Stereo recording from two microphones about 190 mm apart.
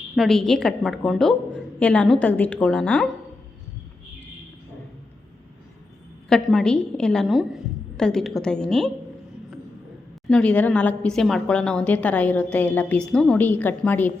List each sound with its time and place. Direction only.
0.2 s a woman's voice: centre (ahead or behind)
6.2 s a woman's voice: 5° left (ahead or behind)
10.2 s a woman's voice: 5° left (ahead or behind)